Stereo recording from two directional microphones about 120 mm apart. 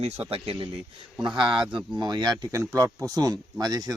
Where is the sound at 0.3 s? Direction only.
55° right (ahead or behind).